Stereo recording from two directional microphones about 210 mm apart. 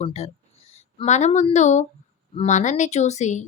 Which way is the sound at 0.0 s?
30° left (ahead or behind).